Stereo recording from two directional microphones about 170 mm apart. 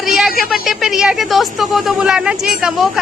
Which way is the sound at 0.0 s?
Centre (ahead or behind).